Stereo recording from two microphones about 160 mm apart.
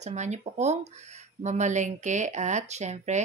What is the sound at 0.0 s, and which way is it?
Speech, 45° right (ahead or behind).